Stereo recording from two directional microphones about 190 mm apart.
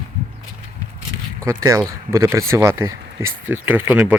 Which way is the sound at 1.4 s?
15° right (ahead or behind).